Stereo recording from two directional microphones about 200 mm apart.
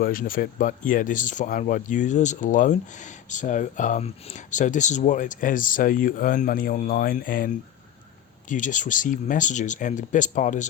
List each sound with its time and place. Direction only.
0.0 s speech: 45° left (ahead or behind)